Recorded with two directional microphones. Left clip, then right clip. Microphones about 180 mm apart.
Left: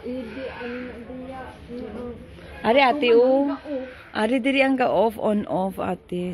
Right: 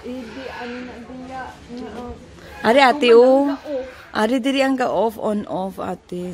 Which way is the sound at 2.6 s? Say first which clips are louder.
Right 4 dB; 40° right (ahead or behind).